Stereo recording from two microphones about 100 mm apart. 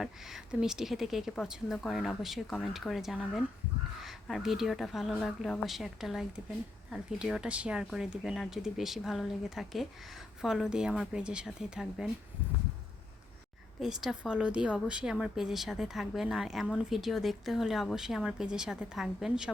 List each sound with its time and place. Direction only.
0.0 s speech: 5° right (ahead or behind)
13.7 s speech: 5° right (ahead or behind)